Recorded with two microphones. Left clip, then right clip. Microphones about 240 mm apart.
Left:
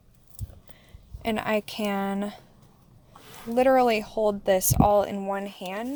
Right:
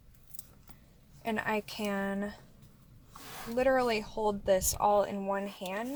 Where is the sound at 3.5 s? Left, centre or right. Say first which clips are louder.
Left 8 dB; left.